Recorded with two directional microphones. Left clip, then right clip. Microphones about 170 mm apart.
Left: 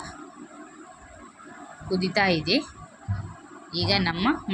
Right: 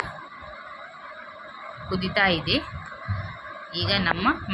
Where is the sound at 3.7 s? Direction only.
25° left (ahead or behind).